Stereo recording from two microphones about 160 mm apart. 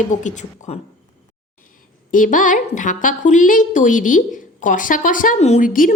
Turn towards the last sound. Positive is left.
turn(degrees=55)  # may be behind; listen again after turning